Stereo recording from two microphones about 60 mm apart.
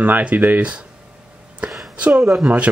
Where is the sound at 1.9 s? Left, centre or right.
Right.